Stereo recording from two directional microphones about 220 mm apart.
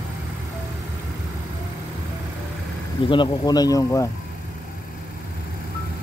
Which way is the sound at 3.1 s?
20° left (ahead or behind).